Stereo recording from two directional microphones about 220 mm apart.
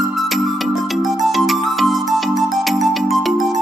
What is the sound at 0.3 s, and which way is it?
Music, centre (ahead or behind).